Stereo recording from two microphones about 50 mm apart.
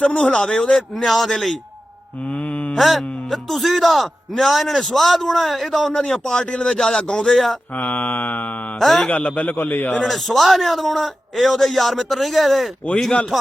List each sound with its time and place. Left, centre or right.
0.0 s speech: left
0.8 s a man's voice: centre
2.7 s a man's voice: centre
6.1 s speech: centre
7.8 s mantra: left
8.8 s a man's voice: centre
9.0 s mantra: left
10.0 s a man's voice: centre